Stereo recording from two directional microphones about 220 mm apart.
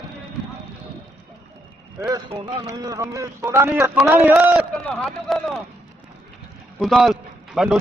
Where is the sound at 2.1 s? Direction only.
15° right (ahead or behind); by 5.6 s centre (ahead or behind).